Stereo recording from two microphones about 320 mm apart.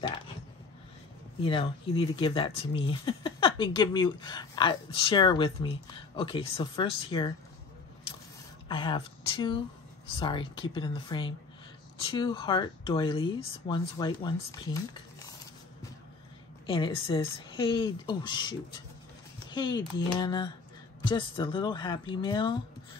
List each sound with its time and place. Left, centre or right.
1.4 s speech: centre
8.6 s speech: centre
16.6 s speech: centre